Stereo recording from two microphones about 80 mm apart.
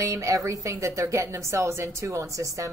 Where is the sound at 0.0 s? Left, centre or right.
Right.